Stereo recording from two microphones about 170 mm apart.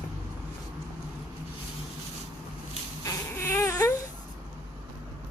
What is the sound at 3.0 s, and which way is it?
Baby cry, 15° left (ahead or behind).